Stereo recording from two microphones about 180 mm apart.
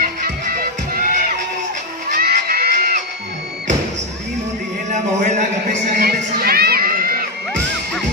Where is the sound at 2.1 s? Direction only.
55° right (ahead or behind).